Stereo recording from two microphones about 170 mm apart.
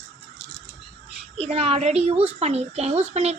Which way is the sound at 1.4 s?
35° right (ahead or behind).